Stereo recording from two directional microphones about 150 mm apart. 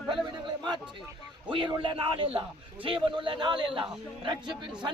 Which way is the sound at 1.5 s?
35° right (ahead or behind).